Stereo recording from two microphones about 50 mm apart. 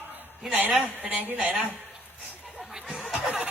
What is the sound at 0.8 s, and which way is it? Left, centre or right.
Speech, right.